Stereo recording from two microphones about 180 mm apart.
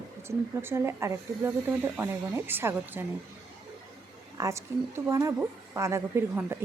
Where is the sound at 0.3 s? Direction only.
15° right (ahead or behind).